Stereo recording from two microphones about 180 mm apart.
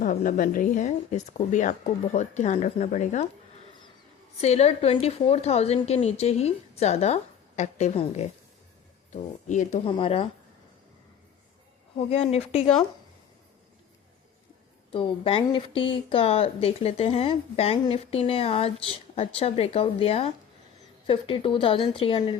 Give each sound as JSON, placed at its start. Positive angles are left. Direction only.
{"t": 0.0, "sound": "a woman's voice", "side_deg": 45}
{"t": 4.4, "sound": "a woman's voice", "side_deg": 35}
{"t": 9.5, "sound": "speech", "side_deg": 45}
{"t": 9.8, "sound": "a woman's voice", "side_deg": 30}
{"t": 12.1, "sound": "a woman's voice", "side_deg": 35}
{"t": 14.9, "sound": "a woman's voice", "side_deg": 30}